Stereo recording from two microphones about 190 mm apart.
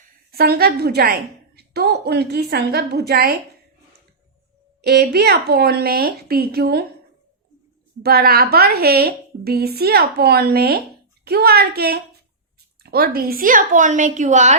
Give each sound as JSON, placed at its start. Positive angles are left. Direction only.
{"t": 0.3, "sound": "a woman's voice", "side_deg": -55}
{"t": 4.8, "sound": "a woman's voice", "side_deg": -55}
{"t": 8.0, "sound": "a woman's voice", "side_deg": -55}